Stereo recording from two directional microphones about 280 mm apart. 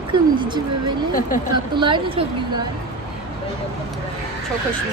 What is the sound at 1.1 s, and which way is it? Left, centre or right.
Speech, left.